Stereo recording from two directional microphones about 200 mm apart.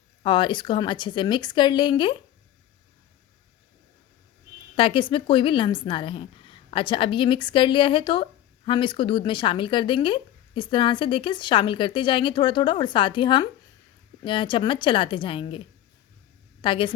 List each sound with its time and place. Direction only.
0.2 s a woman's voice: 25° left (ahead or behind)
4.7 s a woman's voice: 25° left (ahead or behind)